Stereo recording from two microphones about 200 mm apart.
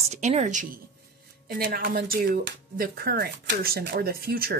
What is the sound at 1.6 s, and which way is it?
Speech, 50° right (ahead or behind).